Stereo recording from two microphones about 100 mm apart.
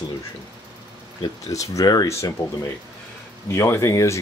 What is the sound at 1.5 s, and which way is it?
Speech, 30° left (ahead or behind).